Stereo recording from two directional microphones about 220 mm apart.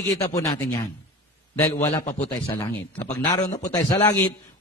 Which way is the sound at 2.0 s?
30° left (ahead or behind).